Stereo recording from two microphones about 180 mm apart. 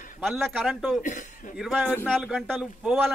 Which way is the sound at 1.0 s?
45° left (ahead or behind).